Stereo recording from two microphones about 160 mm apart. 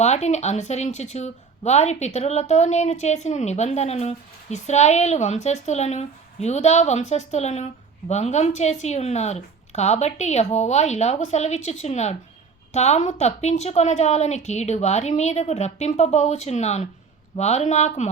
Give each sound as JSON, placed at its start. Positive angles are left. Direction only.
{"t": 0.0, "sound": "a woman's voice", "side_deg": 45}